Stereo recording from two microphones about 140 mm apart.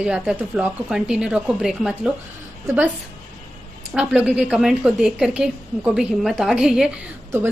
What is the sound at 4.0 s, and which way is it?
A woman's voice, 10° right (ahead or behind).